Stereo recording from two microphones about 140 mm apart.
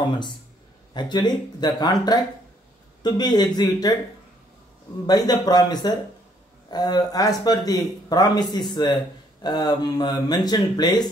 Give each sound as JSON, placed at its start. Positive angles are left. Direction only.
{"t": 0.9, "sound": "speech", "side_deg": 30}
{"t": 5.0, "sound": "speech", "side_deg": 30}